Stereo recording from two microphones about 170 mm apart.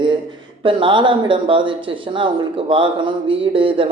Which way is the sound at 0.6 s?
30° right (ahead or behind).